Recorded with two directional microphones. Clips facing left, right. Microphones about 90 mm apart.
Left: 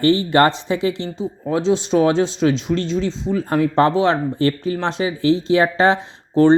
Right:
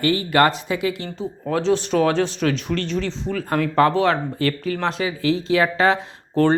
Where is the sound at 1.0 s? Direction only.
15° left (ahead or behind).